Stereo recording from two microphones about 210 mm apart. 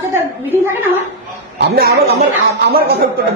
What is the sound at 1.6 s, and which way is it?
Speech, 45° right (ahead or behind).